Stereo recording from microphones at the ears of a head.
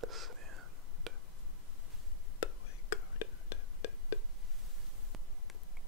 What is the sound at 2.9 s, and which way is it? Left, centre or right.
Whispering, left.